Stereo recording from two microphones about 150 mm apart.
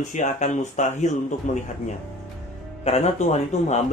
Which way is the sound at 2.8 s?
45° left (ahead or behind).